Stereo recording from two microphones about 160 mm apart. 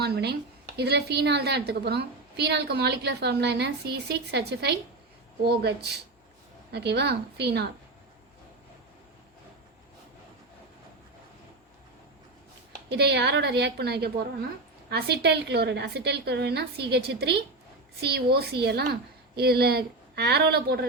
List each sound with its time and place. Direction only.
0.0 s a woman's voice: 90° right
12.9 s a woman's voice: 90° right